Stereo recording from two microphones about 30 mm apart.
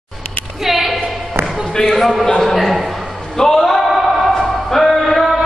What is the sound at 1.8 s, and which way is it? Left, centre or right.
Speech, centre.